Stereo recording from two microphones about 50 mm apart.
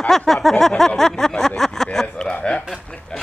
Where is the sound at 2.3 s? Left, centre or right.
Left.